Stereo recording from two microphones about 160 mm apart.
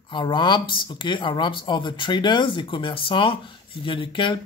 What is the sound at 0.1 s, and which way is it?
Speech, 30° left (ahead or behind).